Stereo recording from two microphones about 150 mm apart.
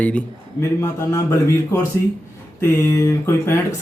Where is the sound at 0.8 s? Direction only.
20° left (ahead or behind).